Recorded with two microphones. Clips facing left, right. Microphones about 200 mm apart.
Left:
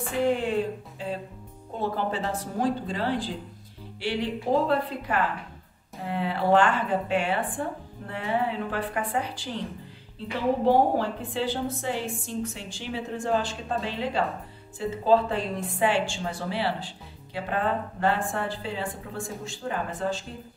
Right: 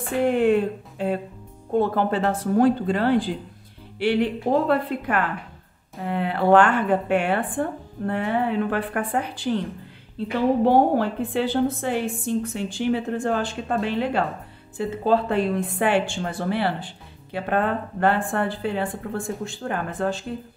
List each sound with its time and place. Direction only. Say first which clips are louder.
0.2 s a woman's voice: right 6 dB; 60° right (ahead or behind)